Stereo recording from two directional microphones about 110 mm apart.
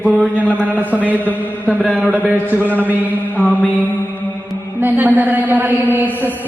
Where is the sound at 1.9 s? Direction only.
15° right (ahead or behind).